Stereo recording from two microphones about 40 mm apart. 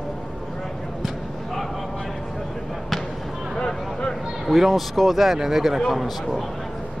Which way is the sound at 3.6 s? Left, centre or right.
Left.